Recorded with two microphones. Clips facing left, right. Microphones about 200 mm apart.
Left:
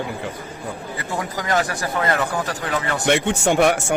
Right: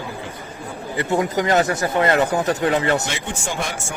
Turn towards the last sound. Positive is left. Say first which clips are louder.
# left 10 dB
turn(degrees=65)  # may be behind; listen again after turning